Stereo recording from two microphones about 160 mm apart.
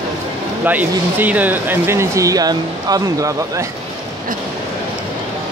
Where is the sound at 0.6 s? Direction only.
10° right (ahead or behind).